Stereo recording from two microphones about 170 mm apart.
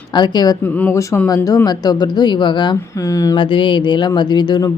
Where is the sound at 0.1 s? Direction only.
25° left (ahead or behind).